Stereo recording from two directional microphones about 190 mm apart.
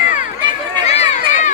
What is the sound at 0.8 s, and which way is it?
Run, 35° left (ahead or behind).